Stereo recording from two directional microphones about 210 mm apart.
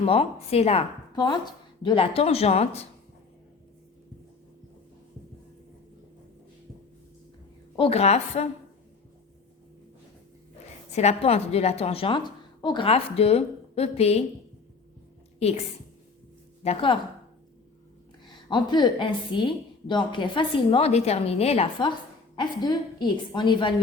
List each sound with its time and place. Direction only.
0.0 s a woman's voice: 30° left (ahead or behind)
7.8 s a woman's voice: 30° left (ahead or behind)
10.9 s a woman's voice: 30° left (ahead or behind)
15.4 s a woman's voice: 30° left (ahead or behind)
16.6 s a woman's voice: 25° left (ahead or behind)
18.4 s a woman's voice: 20° left (ahead or behind)